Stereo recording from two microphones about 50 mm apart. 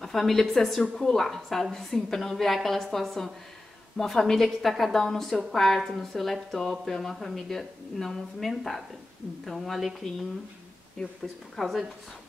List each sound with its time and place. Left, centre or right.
0.0 s a woman's voice: centre
11.0 s a woman's voice: centre
11.5 s a woman's voice: centre